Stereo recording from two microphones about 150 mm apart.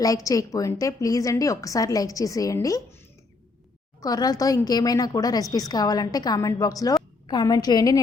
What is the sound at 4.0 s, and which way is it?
A woman's voice, 25° left (ahead or behind).